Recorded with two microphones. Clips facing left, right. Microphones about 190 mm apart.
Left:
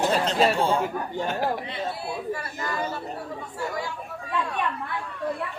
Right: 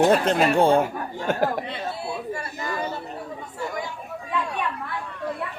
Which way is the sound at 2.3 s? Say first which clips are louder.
Right 1 dB; 20° right (ahead or behind).